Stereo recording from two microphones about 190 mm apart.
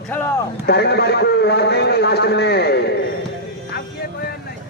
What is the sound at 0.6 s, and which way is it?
A man's voice, 60° left (ahead or behind).